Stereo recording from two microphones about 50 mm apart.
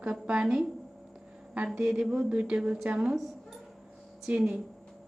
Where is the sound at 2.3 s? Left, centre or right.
Right.